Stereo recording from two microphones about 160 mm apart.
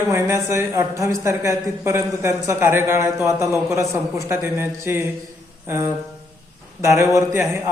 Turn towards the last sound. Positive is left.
turn(degrees=-20)  # may be behind; listen again after turning